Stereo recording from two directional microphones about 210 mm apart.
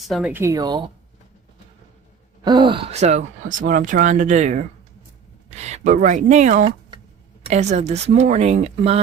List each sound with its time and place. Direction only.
0.1 s speech: 5° right (ahead or behind)
2.4 s speech: 20° right (ahead or behind)